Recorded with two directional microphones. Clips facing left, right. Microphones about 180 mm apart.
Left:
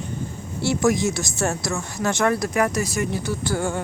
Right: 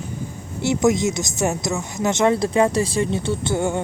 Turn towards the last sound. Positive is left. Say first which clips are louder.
# right 3 dB
turn(degrees=-25)  # may be behind; listen again after turning